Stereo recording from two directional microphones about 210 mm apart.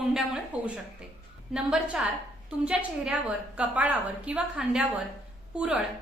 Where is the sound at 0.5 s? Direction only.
5° right (ahead or behind).